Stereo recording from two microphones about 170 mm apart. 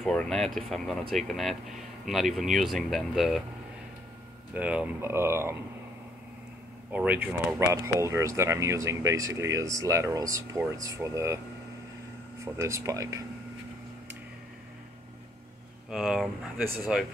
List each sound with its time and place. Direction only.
0.0 s speech: 5° left (ahead or behind)
4.6 s speech: 10° right (ahead or behind)
6.9 s speech: 10° right (ahead or behind)
12.5 s speech: 15° right (ahead or behind)
15.9 s speech: centre (ahead or behind)